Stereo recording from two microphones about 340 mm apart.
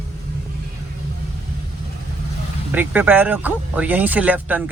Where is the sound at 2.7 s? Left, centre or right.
Centre.